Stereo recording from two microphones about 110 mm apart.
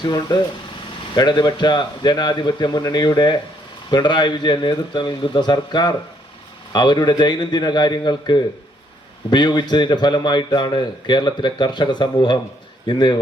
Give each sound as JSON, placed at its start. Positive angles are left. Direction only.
{"t": 0.0, "sound": "a man's voice", "side_deg": 40}